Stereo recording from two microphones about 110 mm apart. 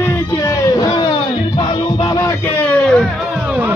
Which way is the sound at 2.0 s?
35° left (ahead or behind).